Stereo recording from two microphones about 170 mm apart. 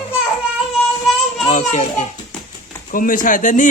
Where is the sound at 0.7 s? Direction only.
Centre (ahead or behind).